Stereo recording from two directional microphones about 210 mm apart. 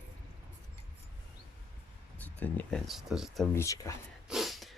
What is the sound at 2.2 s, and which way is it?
Speech, 10° left (ahead or behind).